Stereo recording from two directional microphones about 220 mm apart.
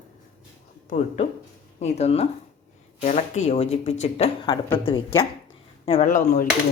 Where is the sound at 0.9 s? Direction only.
30° left (ahead or behind).